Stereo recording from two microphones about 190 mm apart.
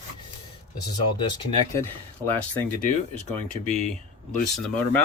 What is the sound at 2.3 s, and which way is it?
Speech, 10° left (ahead or behind).